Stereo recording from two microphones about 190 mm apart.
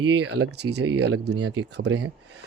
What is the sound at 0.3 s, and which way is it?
Speech, 60° right (ahead or behind).